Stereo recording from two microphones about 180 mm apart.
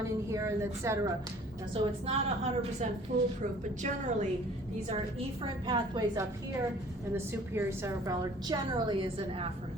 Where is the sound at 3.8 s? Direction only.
40° right (ahead or behind).